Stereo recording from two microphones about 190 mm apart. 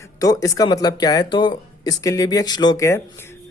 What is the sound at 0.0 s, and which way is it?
Speech, 20° left (ahead or behind).